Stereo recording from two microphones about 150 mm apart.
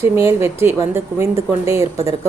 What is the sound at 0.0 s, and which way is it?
A woman's voice, 20° right (ahead or behind).